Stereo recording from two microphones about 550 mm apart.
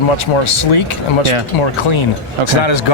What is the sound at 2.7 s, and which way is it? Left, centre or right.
Speech, left.